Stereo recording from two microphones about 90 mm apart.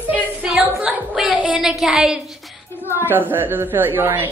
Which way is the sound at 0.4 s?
15° right (ahead or behind).